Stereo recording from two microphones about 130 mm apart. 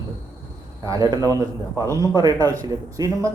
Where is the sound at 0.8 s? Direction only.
25° right (ahead or behind).